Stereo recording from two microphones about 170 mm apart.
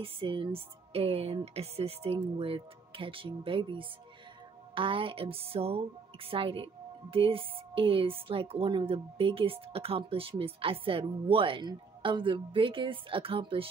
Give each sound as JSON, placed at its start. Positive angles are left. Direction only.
{"t": 0.0, "sound": "a woman's voice", "side_deg": -30}